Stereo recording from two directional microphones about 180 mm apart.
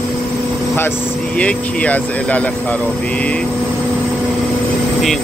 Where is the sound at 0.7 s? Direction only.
10° left (ahead or behind).